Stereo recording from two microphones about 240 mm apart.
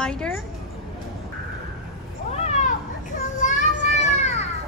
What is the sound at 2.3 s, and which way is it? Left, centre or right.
Cat, left.